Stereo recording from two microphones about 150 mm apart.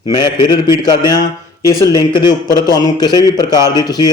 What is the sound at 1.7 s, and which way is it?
A man's voice, 20° left (ahead or behind).